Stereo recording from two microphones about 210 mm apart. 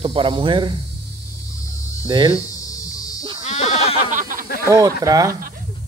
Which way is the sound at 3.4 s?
35° left (ahead or behind).